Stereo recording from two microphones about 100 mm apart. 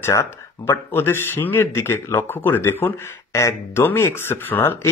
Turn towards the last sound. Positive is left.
turn(degrees=20)  # may be behind; listen again after turning